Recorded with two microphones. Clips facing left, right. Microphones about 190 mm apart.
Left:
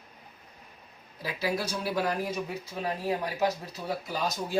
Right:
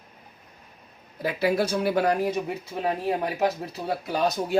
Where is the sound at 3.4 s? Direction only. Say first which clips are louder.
Right 3 dB; 65° right (ahead or behind).